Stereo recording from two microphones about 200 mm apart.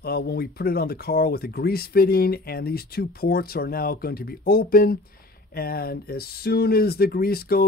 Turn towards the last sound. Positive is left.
turn(degrees=50)  # may be behind; listen again after turning